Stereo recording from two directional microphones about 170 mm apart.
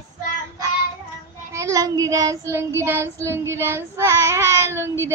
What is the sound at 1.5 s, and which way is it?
Child singing, 20° right (ahead or behind).